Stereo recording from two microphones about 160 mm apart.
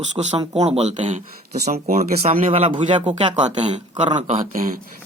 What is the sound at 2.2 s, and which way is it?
Speech, 50° right (ahead or behind).